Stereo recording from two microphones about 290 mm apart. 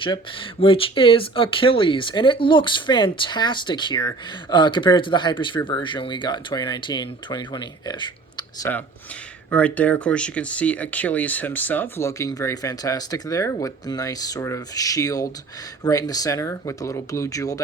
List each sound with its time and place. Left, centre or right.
0.0 s speech: centre